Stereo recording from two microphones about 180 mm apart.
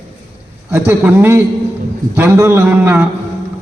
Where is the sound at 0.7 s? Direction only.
10° right (ahead or behind).